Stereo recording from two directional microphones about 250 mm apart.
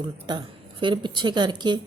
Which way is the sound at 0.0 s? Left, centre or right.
Centre.